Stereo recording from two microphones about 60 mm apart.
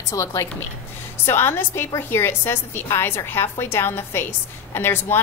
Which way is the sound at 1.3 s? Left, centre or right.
Left.